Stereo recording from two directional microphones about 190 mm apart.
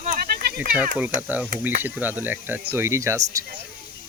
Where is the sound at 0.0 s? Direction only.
50° right (ahead or behind).